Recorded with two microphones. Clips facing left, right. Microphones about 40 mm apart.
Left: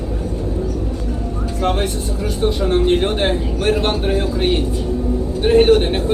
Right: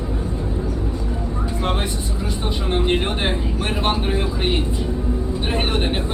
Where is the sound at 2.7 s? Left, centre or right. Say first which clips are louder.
Left 2 dB; right.